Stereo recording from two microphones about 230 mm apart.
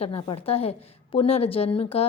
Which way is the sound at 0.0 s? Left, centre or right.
Left.